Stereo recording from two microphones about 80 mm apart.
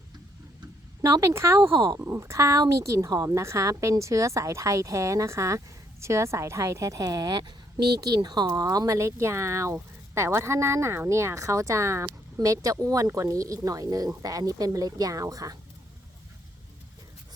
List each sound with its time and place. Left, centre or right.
1.2 s a woman's voice: right
1.7 s speech: right
2.0 s a woman's voice: right
9.0 s a woman's voice: right